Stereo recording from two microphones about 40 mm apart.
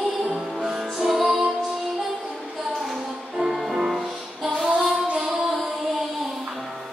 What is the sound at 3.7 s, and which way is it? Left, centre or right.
Music, centre.